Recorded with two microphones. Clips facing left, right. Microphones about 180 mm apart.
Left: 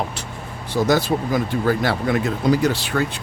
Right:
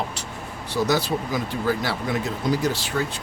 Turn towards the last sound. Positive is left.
turn(degrees=60)  # may be behind; listen again after turning